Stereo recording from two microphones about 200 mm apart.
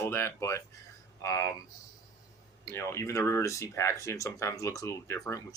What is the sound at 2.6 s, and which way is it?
Speech, 15° left (ahead or behind).